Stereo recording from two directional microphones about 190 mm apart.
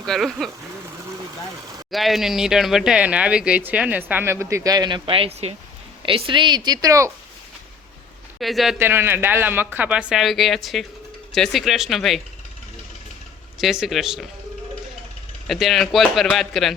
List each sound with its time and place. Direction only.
0.0 s speech: centre (ahead or behind)
1.9 s a woman's voice: centre (ahead or behind); by 7.1 s 15° right (ahead or behind)
8.4 s speech: centre (ahead or behind)
8.8 s speech: 10° right (ahead or behind)
13.6 s speech: centre (ahead or behind)
15.4 s speech: centre (ahead or behind)